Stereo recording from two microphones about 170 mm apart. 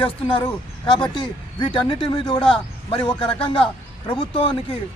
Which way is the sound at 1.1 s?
25° left (ahead or behind).